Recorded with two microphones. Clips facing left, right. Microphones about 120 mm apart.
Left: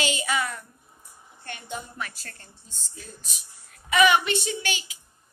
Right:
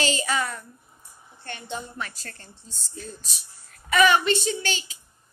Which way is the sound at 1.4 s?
30° right (ahead or behind).